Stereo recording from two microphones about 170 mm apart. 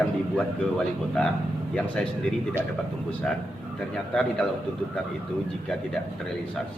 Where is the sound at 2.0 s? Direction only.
5° left (ahead or behind).